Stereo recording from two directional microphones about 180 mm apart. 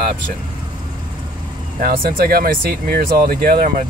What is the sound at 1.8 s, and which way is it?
Speech, 55° right (ahead or behind).